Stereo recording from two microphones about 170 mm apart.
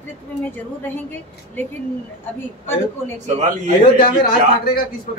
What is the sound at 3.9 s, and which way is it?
Speech, 60° left (ahead or behind).